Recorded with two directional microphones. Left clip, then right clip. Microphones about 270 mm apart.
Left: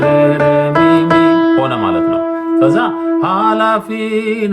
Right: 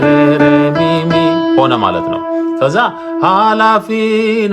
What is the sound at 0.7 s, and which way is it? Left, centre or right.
Music, right.